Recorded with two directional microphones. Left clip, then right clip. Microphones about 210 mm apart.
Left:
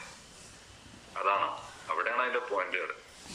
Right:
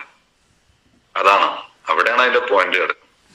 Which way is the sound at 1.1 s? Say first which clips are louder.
Right 15 dB; 55° right (ahead or behind).